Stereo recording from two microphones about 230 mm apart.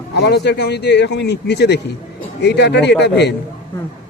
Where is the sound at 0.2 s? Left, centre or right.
Left.